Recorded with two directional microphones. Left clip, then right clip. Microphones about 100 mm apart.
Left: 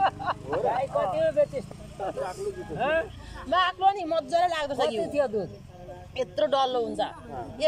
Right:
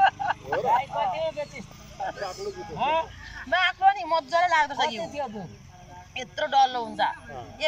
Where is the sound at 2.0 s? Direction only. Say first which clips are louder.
Left 1 dB; 35° left (ahead or behind).